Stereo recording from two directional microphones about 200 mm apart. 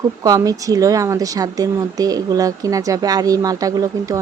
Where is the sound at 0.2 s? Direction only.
15° right (ahead or behind).